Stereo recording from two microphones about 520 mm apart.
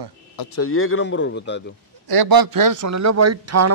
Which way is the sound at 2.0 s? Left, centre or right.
Right.